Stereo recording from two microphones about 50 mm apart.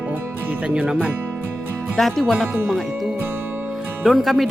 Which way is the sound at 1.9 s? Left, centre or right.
Centre.